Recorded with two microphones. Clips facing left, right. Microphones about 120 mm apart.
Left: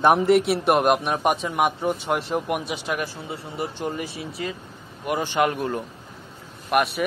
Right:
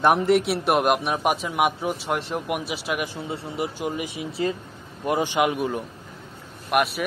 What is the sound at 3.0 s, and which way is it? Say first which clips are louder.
Speech: right 1 dB; 20° right (ahead or behind).